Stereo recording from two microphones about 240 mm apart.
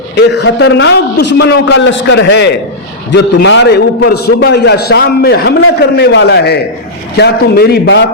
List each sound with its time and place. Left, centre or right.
0.2 s a man's voice: left